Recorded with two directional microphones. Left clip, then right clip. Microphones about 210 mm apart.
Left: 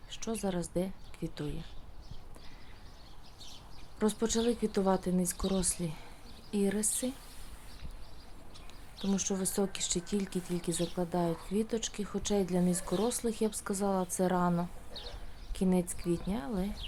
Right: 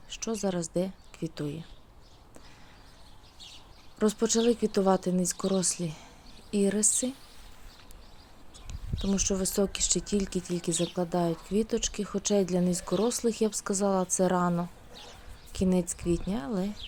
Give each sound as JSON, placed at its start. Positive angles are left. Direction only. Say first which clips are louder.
{"t": 0.1, "sound": "a woman's voice", "louder": "right 4 dB", "side_deg": -10}
{"t": 3.9, "sound": "speech", "louder": "right 5 dB", "side_deg": -15}
{"t": 9.0, "sound": "speech", "louder": "right 5 dB", "side_deg": -15}